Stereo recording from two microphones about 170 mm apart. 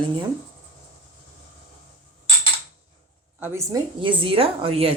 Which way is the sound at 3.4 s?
15° right (ahead or behind).